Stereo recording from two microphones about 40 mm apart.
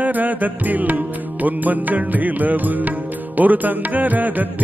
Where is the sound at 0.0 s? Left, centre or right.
Right.